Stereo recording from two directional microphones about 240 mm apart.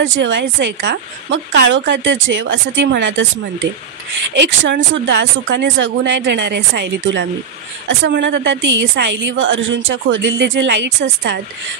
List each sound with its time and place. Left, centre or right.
0.0 s speech: right
4.3 s speech: right